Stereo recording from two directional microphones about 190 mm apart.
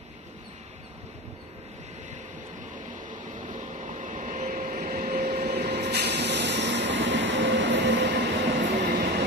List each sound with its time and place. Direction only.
3.3 s vehicle: 40° right (ahead or behind)
5.5 s train: 60° right (ahead or behind)
8.6 s train: 50° right (ahead or behind)